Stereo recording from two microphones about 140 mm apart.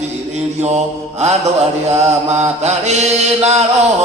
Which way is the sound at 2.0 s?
50° right (ahead or behind).